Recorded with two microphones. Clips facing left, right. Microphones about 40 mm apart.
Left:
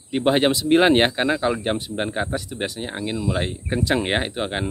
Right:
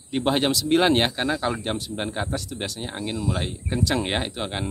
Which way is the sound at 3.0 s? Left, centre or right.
Left.